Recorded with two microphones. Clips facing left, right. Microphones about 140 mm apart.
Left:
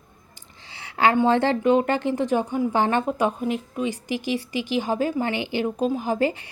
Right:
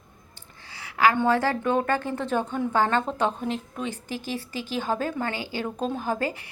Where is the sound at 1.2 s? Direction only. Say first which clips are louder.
Left 4 dB; 25° left (ahead or behind).